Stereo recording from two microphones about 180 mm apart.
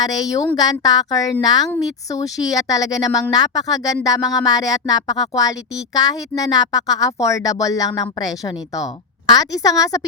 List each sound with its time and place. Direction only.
0.0 s speech: 20° left (ahead or behind)